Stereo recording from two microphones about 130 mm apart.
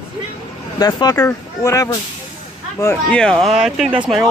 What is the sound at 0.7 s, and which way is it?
Speech, 30° left (ahead or behind).